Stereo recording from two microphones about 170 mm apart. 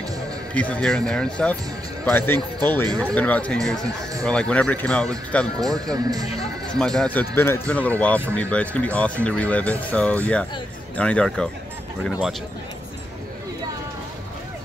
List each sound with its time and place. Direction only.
0.6 s speech: 5° left (ahead or behind)
5.6 s speech: 20° right (ahead or behind)
6.7 s speech: 5° left (ahead or behind)